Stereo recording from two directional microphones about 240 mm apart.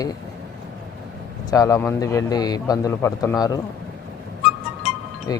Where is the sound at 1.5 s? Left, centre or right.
Centre.